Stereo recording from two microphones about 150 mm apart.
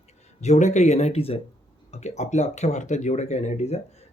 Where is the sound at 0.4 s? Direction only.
50° left (ahead or behind).